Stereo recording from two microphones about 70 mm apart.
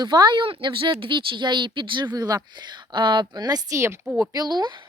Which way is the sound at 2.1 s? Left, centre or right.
Right.